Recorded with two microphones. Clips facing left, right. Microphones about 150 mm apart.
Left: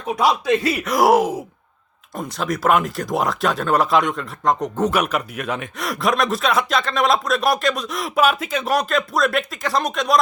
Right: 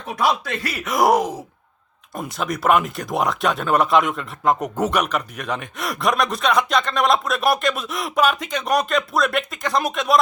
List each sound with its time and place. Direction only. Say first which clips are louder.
0.2 s speech: left 3 dB; 20° left (ahead or behind)
0.9 s speech: left 1 dB; centre (ahead or behind)
4.9 s speech: left 1 dB; 10° left (ahead or behind)